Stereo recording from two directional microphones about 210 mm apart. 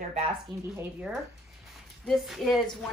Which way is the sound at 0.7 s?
5° right (ahead or behind).